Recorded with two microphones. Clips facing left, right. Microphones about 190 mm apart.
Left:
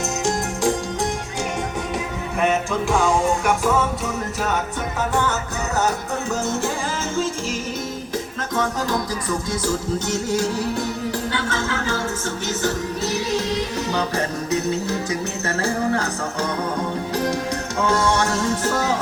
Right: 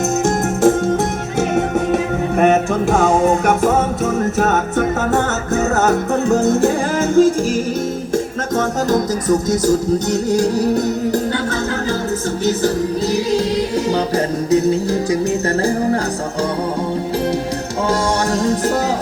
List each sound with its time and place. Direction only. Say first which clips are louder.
0.3 s music: right 7 dB; 55° right (ahead or behind)
2.4 s music: right 6 dB; 45° right (ahead or behind)
5.7 s music: right 5 dB; 60° right (ahead or behind)
7.2 s music: right 13 dB; 55° right (ahead or behind)
14.5 s music: right 8 dB; 35° right (ahead or behind)
17.8 s music: right 2 dB; 35° right (ahead or behind)